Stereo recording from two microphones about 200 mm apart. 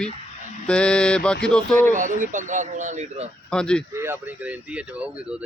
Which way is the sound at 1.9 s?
40° right (ahead or behind).